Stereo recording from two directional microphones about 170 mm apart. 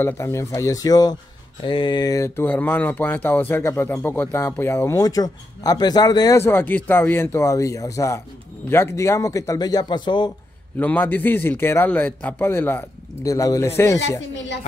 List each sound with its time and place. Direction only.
0.0 s a man's voice: 15° left (ahead or behind)
10.8 s speech: 10° left (ahead or behind)